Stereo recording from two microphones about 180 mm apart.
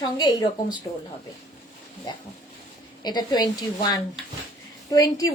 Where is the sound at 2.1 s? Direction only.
25° left (ahead or behind).